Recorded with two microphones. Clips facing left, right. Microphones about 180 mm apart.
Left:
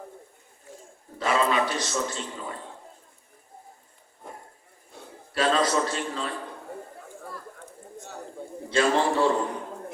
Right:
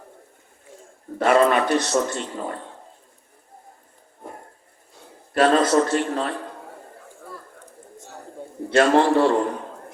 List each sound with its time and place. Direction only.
1.2 s a man's voice: 60° right (ahead or behind)
5.0 s a sound: 60° left (ahead or behind)
5.3 s a man's voice: 60° right (ahead or behind)
8.7 s a man's voice: 70° right (ahead or behind)